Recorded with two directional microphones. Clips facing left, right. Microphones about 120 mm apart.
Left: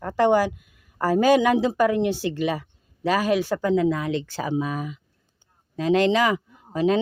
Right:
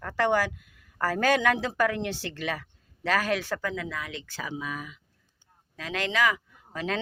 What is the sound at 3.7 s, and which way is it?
Speech, 30° left (ahead or behind).